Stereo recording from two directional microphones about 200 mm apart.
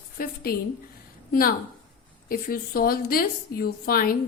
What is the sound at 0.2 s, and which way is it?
A woman's voice, 45° left (ahead or behind).